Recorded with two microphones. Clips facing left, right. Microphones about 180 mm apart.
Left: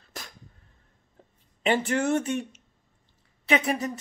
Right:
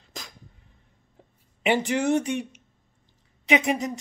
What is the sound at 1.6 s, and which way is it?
Speech, 15° right (ahead or behind).